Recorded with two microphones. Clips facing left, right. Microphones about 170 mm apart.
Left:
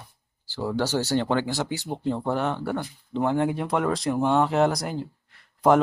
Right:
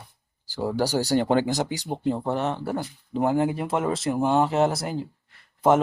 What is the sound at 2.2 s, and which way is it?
Speech, centre (ahead or behind).